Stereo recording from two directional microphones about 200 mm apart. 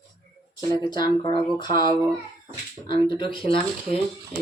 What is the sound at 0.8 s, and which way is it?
Speech, 20° left (ahead or behind).